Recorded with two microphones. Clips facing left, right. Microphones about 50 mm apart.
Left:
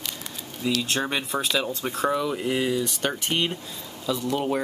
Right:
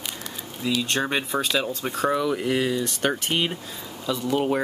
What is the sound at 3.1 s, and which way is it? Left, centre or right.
Speech, centre.